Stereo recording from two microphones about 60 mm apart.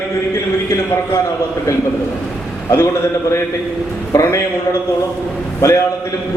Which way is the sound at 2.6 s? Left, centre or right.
Left.